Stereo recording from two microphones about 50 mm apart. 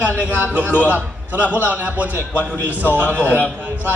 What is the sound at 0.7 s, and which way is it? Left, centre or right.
Speech, left.